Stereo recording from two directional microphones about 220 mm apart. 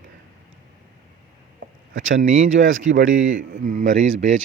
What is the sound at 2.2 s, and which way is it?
Speech, 35° right (ahead or behind).